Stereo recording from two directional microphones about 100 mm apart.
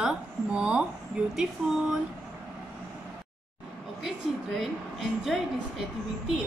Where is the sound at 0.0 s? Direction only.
5° right (ahead or behind).